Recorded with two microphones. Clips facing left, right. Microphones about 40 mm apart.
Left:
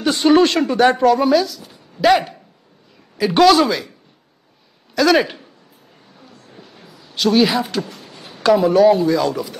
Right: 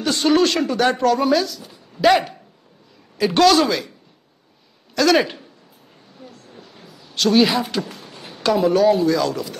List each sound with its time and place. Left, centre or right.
0.0 s speech: centre
0.7 s a man's voice: centre
4.9 s a man's voice: centre
6.8 s a man's voice: centre
7.9 s a sound: right
8.4 s a man's voice: centre